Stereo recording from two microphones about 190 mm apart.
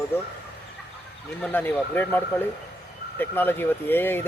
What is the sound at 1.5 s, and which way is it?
Speech, 10° left (ahead or behind).